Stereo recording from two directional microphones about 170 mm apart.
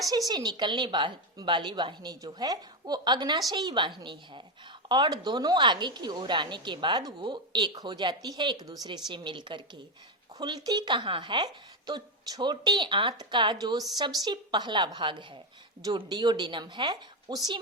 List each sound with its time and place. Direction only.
0.3 s speech: 25° right (ahead or behind)